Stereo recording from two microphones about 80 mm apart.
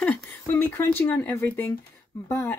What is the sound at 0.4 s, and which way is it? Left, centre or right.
Speech, left.